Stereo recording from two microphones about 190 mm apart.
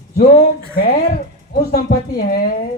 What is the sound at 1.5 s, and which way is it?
Speech, 55° left (ahead or behind).